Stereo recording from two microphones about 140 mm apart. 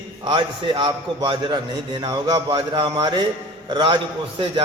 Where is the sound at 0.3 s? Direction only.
35° right (ahead or behind).